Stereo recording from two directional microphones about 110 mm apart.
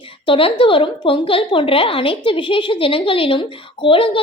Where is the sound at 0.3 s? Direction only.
55° left (ahead or behind).